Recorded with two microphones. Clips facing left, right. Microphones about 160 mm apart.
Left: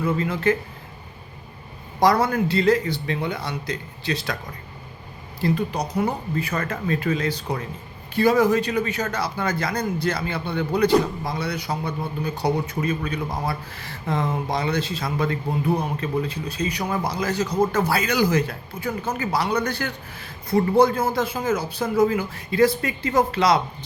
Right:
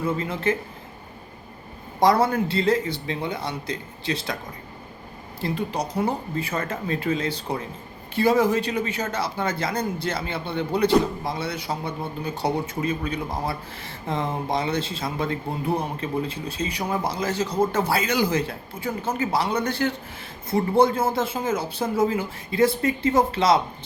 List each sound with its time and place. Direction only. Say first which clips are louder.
0.0 s speech: left 3 dB; 25° right (ahead or behind)
2.0 s speech: even; 25° right (ahead or behind)
5.4 s speech: left 3 dB; 25° right (ahead or behind)